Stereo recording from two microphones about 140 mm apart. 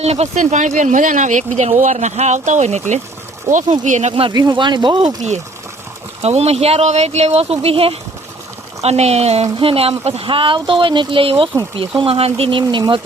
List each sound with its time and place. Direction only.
0.0 s speech: 50° right (ahead or behind)
4.1 s speech: 35° right (ahead or behind)
5.0 s speech: 55° right (ahead or behind); by 13.0 s 35° right (ahead or behind)